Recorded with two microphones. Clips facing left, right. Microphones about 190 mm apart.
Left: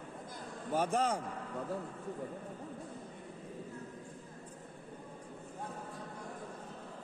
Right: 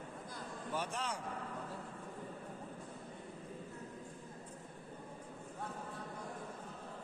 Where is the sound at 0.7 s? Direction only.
45° left (ahead or behind).